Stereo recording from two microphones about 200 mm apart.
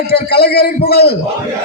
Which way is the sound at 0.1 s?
55° left (ahead or behind).